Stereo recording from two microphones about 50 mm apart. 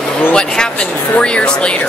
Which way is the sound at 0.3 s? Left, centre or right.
Centre.